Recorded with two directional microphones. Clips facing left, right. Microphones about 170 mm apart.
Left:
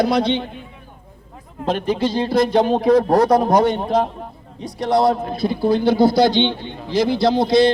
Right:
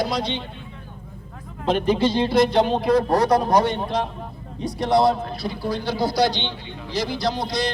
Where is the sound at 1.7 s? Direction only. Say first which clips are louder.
Even; 45° left (ahead or behind).